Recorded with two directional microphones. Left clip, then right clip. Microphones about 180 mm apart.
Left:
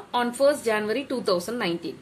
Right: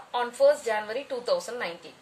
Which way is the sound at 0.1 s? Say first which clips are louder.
Left 1 dB; 30° left (ahead or behind).